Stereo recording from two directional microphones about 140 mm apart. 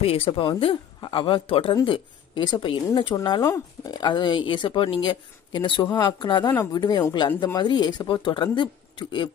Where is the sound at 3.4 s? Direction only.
20° left (ahead or behind).